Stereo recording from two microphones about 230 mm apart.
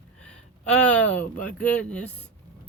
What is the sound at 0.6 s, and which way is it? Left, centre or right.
Speech, centre.